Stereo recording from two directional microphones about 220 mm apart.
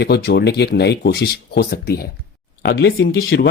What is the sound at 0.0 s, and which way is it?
Speech, 50° left (ahead or behind).